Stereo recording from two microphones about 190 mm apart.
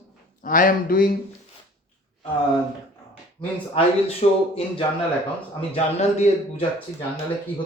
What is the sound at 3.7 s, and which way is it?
A man's voice, 30° left (ahead or behind).